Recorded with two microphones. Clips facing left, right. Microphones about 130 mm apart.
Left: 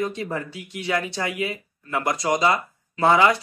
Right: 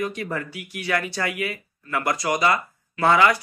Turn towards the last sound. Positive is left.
turn(degrees=25)  # may be behind; listen again after turning